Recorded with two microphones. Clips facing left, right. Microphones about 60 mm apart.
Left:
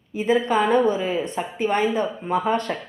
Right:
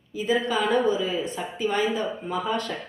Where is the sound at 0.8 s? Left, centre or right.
Left.